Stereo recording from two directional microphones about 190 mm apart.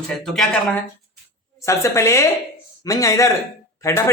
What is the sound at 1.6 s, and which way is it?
Speech, 15° left (ahead or behind).